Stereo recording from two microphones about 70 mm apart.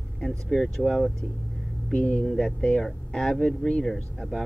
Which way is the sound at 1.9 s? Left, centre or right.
Centre.